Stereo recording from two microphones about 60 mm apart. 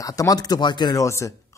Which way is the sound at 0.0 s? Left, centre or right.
Left.